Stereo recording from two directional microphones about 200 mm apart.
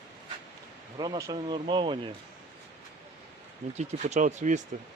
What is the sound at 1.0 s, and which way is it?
Speech, 20° right (ahead or behind).